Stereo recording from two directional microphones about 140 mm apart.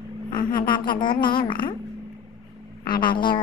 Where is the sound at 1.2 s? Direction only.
35° left (ahead or behind).